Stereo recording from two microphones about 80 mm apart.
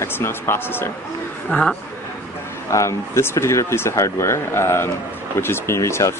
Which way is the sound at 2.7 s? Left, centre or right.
Left.